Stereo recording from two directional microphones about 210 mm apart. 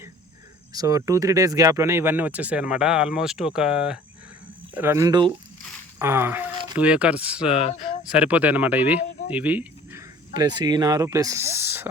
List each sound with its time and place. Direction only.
0.7 s speech: 15° right (ahead or behind)
7.5 s speech: 30° left (ahead or behind)
8.1 s speech: 5° right (ahead or behind)
10.3 s speech: 20° right (ahead or behind)